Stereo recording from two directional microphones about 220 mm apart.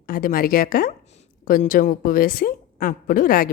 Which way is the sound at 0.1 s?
40° left (ahead or behind).